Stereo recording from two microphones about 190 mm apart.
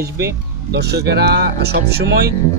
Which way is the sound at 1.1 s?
60° right (ahead or behind).